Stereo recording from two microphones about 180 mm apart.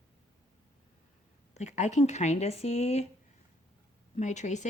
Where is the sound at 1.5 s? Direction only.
40° left (ahead or behind).